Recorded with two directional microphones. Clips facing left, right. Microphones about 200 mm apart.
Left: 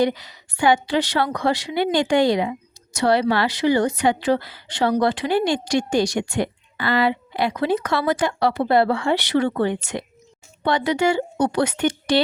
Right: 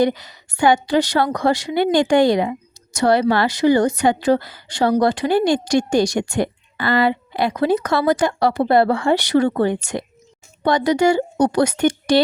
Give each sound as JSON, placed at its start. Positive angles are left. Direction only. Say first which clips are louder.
{"t": 0.0, "sound": "a woman's voice", "louder": "right 2 dB", "side_deg": -45}